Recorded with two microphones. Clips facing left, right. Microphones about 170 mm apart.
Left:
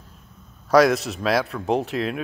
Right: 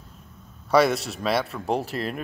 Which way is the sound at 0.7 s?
Centre (ahead or behind).